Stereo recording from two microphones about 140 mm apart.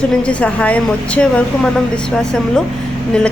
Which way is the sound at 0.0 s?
5° left (ahead or behind).